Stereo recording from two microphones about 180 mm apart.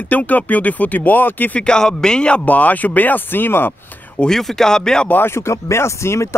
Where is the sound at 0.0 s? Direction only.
10° left (ahead or behind).